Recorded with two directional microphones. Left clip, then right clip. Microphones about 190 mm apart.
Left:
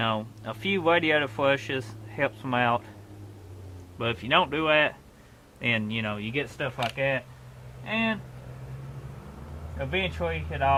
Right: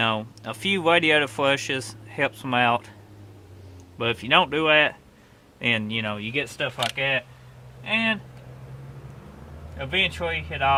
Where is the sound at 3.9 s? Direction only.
45° right (ahead or behind); by 8.2 s 25° right (ahead or behind).